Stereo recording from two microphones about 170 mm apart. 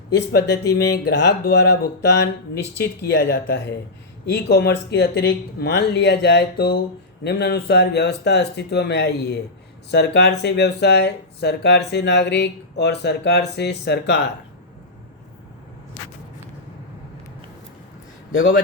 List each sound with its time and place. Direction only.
0.1 s speech: 90° left
0.8 s speech: 80° left
18.3 s speech: 45° left (ahead or behind)